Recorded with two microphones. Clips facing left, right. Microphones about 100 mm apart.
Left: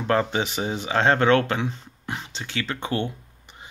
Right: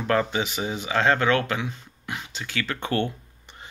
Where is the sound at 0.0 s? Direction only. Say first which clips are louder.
Left 1 dB; 30° left (ahead or behind).